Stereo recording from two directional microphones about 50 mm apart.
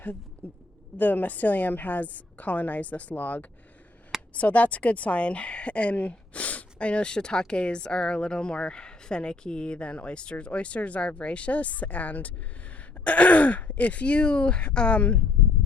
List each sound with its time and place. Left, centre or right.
0.9 s a woman's voice: left